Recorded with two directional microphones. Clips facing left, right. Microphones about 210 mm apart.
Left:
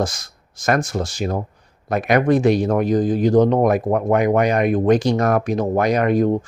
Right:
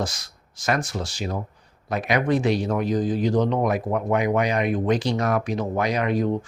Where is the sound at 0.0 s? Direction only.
50° left (ahead or behind).